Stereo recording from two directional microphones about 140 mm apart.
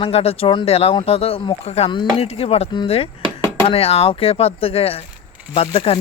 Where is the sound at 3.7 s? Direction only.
45° left (ahead or behind).